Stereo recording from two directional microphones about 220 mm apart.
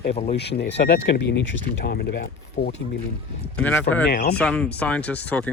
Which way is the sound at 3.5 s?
5° left (ahead or behind).